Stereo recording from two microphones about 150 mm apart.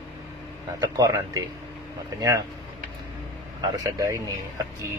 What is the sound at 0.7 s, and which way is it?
Speech, 20° right (ahead or behind).